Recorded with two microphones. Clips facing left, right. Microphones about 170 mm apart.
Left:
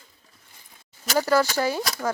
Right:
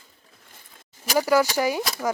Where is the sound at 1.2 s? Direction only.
10° right (ahead or behind).